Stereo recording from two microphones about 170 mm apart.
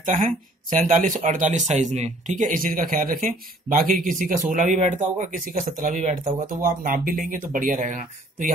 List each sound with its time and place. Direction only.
0.0 s speech: 50° right (ahead or behind)